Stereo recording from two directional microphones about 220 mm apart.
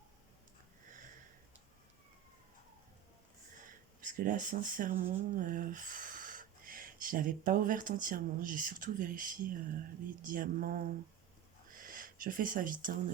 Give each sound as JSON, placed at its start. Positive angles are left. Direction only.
{"t": 4.0, "sound": "speech", "side_deg": -35}